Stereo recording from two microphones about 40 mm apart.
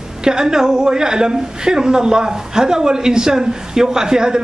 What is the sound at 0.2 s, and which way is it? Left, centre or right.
A woman's voice, centre.